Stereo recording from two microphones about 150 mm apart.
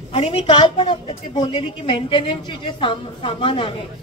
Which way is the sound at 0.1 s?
40° left (ahead or behind).